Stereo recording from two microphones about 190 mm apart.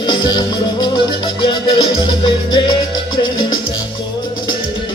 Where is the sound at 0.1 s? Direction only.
20° left (ahead or behind).